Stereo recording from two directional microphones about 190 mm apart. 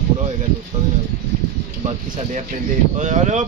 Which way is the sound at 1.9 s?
35° right (ahead or behind).